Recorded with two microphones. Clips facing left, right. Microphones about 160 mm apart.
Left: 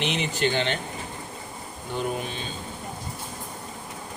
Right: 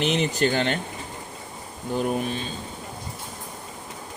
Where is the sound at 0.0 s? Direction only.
40° right (ahead or behind).